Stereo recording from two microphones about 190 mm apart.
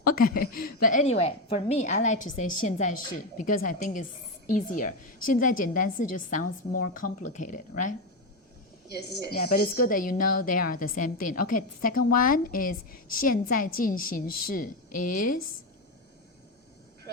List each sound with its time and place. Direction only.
0.3 s a woman's voice: 50° left (ahead or behind)
8.9 s a woman's voice: 55° left (ahead or behind)